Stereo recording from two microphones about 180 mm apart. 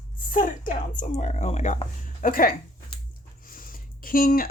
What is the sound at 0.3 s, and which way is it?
Speech, 45° left (ahead or behind).